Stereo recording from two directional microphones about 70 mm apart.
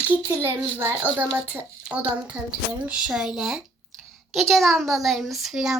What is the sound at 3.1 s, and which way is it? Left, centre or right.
A child's voice, centre.